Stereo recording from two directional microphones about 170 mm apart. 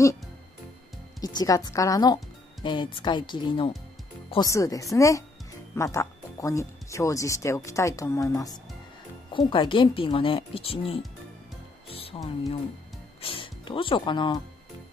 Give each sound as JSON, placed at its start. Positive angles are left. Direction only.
{"t": 1.2, "sound": "speech", "side_deg": 20}
{"t": 11.9, "sound": "music", "side_deg": 35}
{"t": 13.2, "sound": "speech", "side_deg": 30}